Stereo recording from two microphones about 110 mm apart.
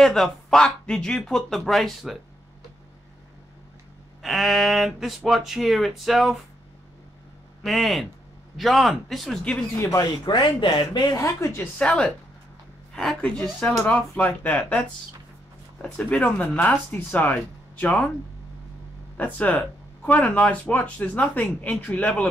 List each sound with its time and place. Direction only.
0.0 s speech: 5° left (ahead or behind)
4.2 s speech: centre (ahead or behind)
7.6 s speech: centre (ahead or behind)
9.8 s speech: 30° left (ahead or behind)
10.2 s speech: 45° left (ahead or behind); by 11.6 s 30° left (ahead or behind)
11.8 s speech: 10° left (ahead or behind)
15.8 s speech: 10° left (ahead or behind)
19.1 s speech: 15° left (ahead or behind)